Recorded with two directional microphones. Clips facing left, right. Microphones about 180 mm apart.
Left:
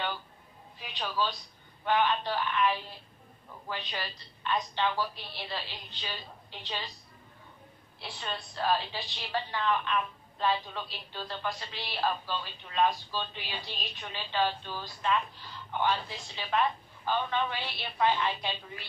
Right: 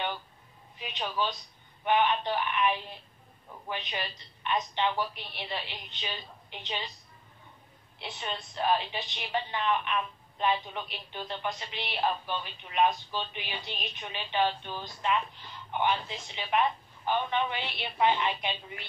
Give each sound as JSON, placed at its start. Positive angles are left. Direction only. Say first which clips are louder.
{"t": 0.7, "sound": "a woman's voice", "louder": "even", "side_deg": -20}
{"t": 8.0, "sound": "a woman's voice", "louder": "right 1 dB", "side_deg": -20}